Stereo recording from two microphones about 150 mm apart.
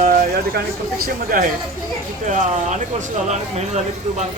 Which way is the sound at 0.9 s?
75° right (ahead or behind).